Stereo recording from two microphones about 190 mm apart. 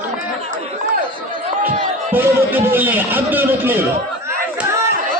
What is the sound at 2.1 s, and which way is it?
A man's voice, 10° right (ahead or behind).